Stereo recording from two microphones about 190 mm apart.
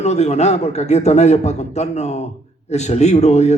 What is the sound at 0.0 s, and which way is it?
A man's voice, 35° left (ahead or behind).